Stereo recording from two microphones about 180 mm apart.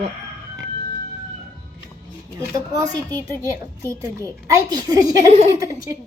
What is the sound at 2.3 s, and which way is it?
A woman's voice, 20° right (ahead or behind).